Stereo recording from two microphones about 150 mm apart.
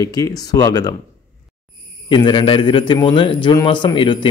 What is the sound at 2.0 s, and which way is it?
A man's voice, 30° left (ahead or behind).